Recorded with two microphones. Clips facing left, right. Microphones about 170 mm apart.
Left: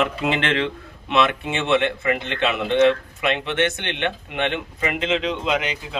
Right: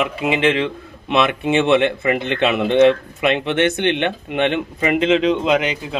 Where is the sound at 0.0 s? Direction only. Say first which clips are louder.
Right 4 dB; 5° right (ahead or behind).